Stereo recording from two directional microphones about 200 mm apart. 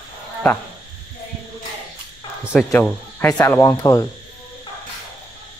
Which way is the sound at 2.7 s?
10° left (ahead or behind).